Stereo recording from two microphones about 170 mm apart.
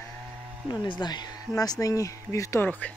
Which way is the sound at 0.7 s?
25° left (ahead or behind).